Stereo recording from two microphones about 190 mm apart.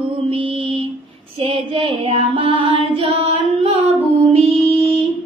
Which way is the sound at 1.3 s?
30° right (ahead or behind).